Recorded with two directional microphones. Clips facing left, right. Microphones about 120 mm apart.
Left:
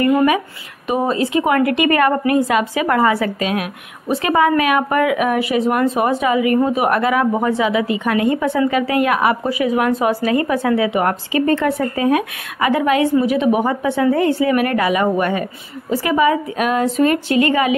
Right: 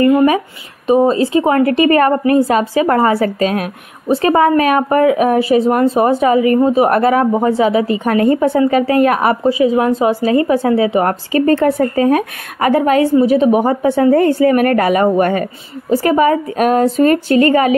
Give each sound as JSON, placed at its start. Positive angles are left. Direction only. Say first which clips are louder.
{"t": 0.8, "sound": "speech", "louder": "right 7 dB", "side_deg": -30}
{"t": 9.4, "sound": "speech", "louder": "right 5 dB", "side_deg": -25}